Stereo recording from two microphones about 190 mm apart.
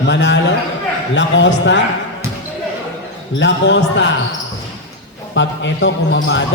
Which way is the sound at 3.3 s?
75° left (ahead or behind).